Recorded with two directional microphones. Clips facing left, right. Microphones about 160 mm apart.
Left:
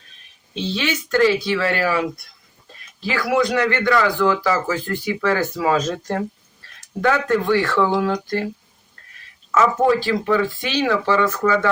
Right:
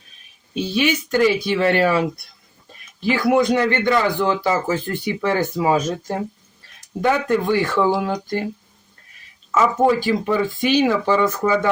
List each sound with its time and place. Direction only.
0.5 s speech: 10° right (ahead or behind)
3.1 s speech: 20° right (ahead or behind)
9.5 s speech: 15° right (ahead or behind)